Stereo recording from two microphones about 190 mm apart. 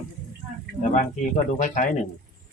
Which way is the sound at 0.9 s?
40° left (ahead or behind).